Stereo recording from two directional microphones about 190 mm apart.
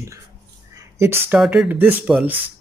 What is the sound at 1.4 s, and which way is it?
Speech, 5° right (ahead or behind).